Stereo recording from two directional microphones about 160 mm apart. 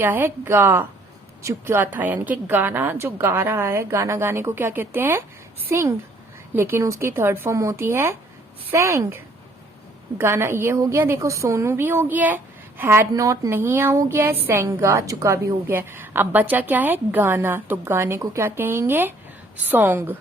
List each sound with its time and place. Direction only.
0.0 s a woman's voice: 10° right (ahead or behind)